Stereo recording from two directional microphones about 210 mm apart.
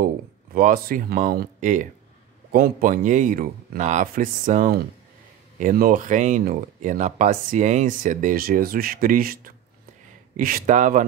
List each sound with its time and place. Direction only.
0.6 s speech: 40° right (ahead or behind)